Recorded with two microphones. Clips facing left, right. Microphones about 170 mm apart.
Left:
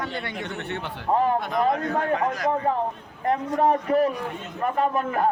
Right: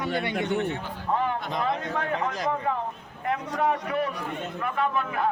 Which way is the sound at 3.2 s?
40° left (ahead or behind).